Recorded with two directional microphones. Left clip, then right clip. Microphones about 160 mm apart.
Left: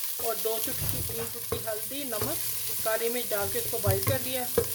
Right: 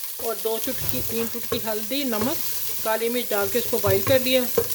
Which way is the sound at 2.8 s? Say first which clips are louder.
Right 5 dB; 40° right (ahead or behind).